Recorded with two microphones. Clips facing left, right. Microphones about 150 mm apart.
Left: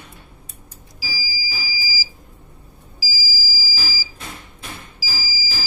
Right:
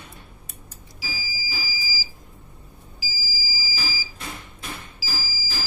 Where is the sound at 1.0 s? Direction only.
5° left (ahead or behind).